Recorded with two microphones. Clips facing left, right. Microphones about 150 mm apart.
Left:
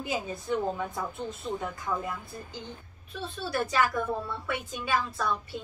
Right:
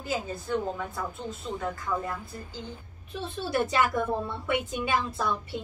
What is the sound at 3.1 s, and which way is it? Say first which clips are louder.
A woman's voice: right 3 dB; 20° right (ahead or behind).